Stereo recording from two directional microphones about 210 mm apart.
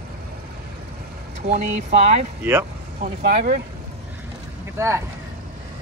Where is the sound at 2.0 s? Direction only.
35° right (ahead or behind).